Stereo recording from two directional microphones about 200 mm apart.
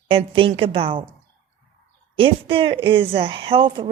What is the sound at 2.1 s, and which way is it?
A woman's voice, 25° right (ahead or behind).